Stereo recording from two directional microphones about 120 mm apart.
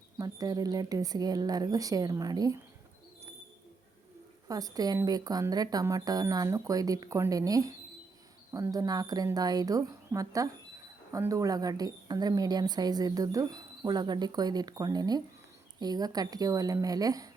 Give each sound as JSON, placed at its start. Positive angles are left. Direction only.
{"t": 0.2, "sound": "speech", "side_deg": -30}
{"t": 4.4, "sound": "a woman's voice", "side_deg": -30}